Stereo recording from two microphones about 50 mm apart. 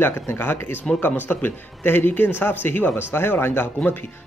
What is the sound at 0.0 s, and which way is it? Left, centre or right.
Speech, left.